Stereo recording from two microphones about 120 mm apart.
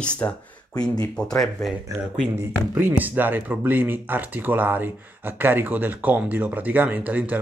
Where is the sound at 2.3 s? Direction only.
15° right (ahead or behind).